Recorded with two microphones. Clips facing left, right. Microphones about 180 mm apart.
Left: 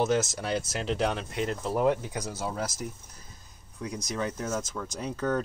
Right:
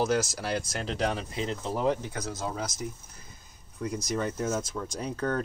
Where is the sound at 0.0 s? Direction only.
Centre (ahead or behind).